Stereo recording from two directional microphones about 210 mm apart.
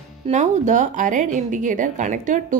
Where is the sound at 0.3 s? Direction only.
35° right (ahead or behind).